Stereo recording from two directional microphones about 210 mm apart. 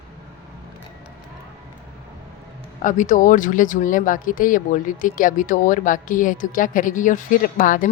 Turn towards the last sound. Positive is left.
turn(degrees=40)  # may be behind; listen again after turning